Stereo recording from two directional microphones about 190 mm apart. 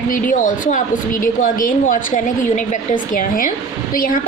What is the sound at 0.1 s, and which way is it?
A woman's voice, 45° left (ahead or behind).